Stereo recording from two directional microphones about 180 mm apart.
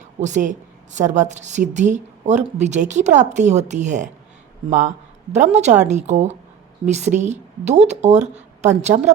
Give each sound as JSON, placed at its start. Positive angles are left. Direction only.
{"t": 0.2, "sound": "speech", "side_deg": -40}